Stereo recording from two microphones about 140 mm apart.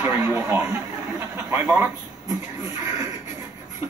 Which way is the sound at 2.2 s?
25° right (ahead or behind).